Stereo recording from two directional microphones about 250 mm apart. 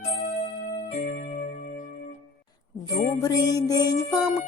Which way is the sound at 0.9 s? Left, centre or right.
Left.